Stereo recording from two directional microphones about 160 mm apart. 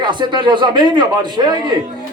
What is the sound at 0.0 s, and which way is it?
Speech, 30° right (ahead or behind).